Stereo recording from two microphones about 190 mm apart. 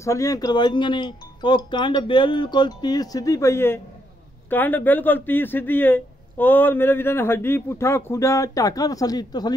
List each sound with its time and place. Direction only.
0.0 s speech: 15° left (ahead or behind)